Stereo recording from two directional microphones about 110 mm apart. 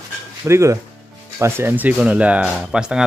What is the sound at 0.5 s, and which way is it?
Speech, 25° right (ahead or behind).